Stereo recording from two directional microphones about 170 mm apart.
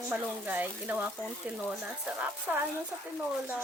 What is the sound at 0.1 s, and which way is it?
Speech, 10° right (ahead or behind).